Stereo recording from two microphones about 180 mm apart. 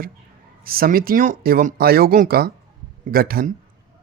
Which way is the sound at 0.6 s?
55° right (ahead or behind).